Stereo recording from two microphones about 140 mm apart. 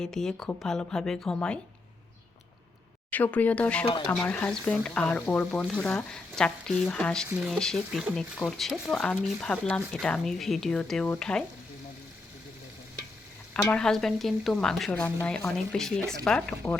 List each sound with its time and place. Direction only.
0.0 s speech: 5° left (ahead or behind)
3.1 s speech: 10° left (ahead or behind)
7.3 s speech: 10° right (ahead or behind)
7.6 s speech: 5° left (ahead or behind)
13.5 s speech: 5° left (ahead or behind)